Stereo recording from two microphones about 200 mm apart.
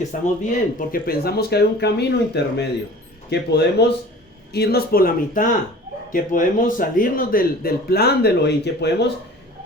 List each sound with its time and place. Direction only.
0.1 s a man's voice: 40° left (ahead or behind); by 9.0 s 55° left (ahead or behind)